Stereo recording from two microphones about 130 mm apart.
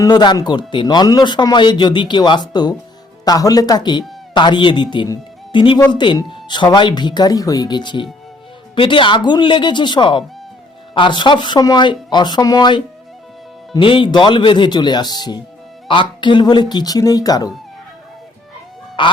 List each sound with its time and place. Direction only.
0.0 s speech: 35° left (ahead or behind)
19.0 s goose: 40° left (ahead or behind)